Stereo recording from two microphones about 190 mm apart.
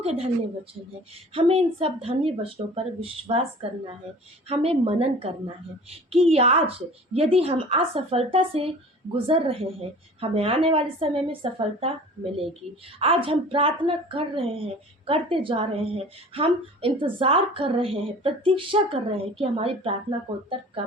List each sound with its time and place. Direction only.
0.0 s a woman's voice: 30° right (ahead or behind)
1.3 s a woman's voice: 30° right (ahead or behind)